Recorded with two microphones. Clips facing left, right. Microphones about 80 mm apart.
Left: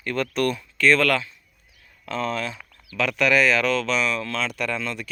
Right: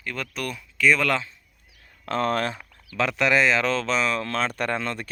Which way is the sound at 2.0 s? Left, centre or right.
Right.